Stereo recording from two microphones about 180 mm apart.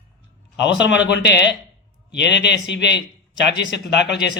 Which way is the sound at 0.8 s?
75° left (ahead or behind).